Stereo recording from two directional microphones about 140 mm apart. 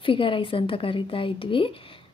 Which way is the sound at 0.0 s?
40° left (ahead or behind).